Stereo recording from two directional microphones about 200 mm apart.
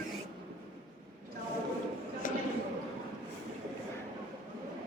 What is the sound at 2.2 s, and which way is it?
Basketball bounce, 40° left (ahead or behind).